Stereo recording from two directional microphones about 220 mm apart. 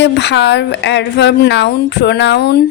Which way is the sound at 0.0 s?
50° left (ahead or behind).